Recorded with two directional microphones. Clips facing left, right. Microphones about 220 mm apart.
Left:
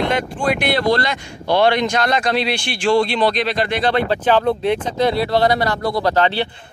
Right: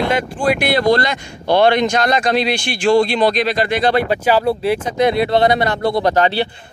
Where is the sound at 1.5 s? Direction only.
50° right (ahead or behind).